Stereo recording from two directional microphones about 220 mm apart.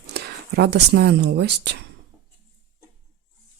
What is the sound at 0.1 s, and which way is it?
Speech, 50° right (ahead or behind).